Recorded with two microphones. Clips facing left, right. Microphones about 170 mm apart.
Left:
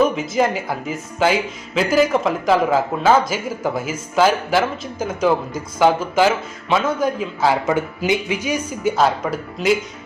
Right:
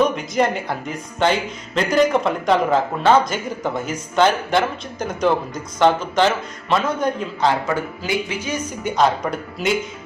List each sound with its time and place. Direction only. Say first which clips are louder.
0.0 s speech: left 1 dB; 5° left (ahead or behind)
7.7 s speech: left 4 dB; 20° left (ahead or behind)
8.4 s speech: left 4 dB; 5° left (ahead or behind)